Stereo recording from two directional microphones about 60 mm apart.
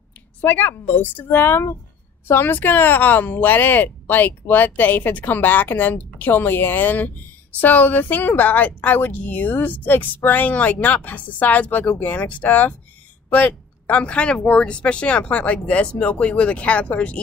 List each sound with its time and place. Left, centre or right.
0.4 s speech: left
1.4 s a woman's voice: left